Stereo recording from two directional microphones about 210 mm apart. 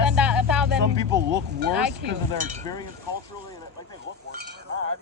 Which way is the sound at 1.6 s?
55° right (ahead or behind).